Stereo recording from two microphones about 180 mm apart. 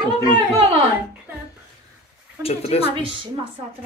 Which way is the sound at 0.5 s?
35° right (ahead or behind).